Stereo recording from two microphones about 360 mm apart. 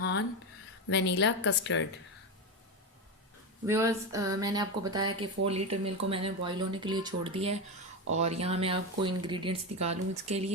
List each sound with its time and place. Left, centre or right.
0.0 s a sound: left
0.9 s a woman's voice: left
3.7 s speech: centre
5.7 s speech: right
6.1 s speech: centre